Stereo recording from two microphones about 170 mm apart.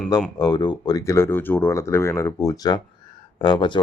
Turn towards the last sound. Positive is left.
turn(degrees=25)  # may be behind; listen again after turning